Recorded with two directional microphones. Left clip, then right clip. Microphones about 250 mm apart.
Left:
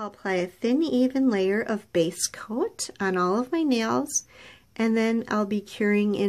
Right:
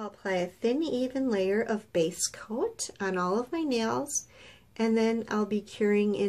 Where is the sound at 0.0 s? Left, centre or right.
Left.